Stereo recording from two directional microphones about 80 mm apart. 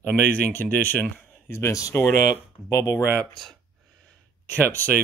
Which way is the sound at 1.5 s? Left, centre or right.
Left.